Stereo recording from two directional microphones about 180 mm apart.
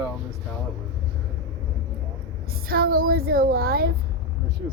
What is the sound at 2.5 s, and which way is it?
A woman's voice, 55° right (ahead or behind).